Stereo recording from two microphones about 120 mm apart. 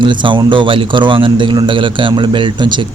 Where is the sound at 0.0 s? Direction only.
40° right (ahead or behind).